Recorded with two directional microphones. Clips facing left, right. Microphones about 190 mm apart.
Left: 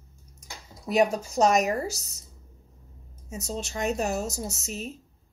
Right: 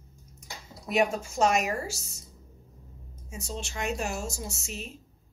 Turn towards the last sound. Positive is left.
turn(degrees=40)  # may be behind; listen again after turning